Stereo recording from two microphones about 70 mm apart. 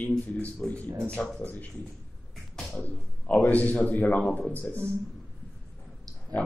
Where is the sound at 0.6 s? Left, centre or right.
Centre.